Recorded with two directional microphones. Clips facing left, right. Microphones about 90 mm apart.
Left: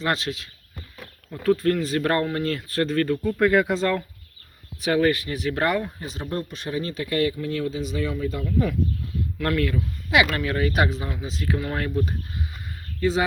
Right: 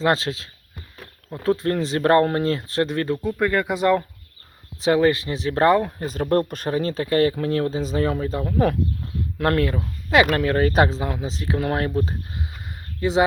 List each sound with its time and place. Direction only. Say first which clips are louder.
0.0 s speech: right 5 dB; 30° right (ahead or behind)
0.9 s a sound: right 3 dB; 30° right (ahead or behind)
1.8 s speech: right 5 dB; 25° right (ahead or behind)
3.3 s speech: left 4 dB; centre (ahead or behind)
3.7 s speech: right 3 dB; 15° right (ahead or behind)
4.8 s speech: right 3 dB; 25° right (ahead or behind)
6.0 s speech: right 8 dB; 45° right (ahead or behind)
6.2 s speech: right 10 dB; 65° right (ahead or behind)
6.6 s speech: right 5 dB; 40° right (ahead or behind)
9.6 s speech: right 2 dB; 35° right (ahead or behind)